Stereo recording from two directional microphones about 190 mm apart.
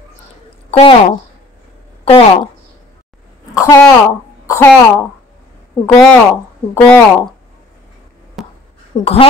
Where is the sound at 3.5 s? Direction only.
15° left (ahead or behind).